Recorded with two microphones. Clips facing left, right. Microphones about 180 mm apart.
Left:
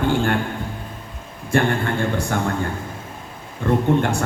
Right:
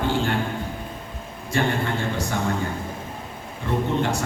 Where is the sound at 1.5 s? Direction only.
55° left (ahead or behind).